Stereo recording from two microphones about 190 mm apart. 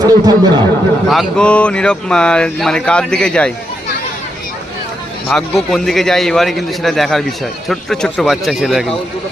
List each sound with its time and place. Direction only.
0.0 s speech: 20° right (ahead or behind)
1.0 s speech: centre (ahead or behind)
5.3 s speech: centre (ahead or behind)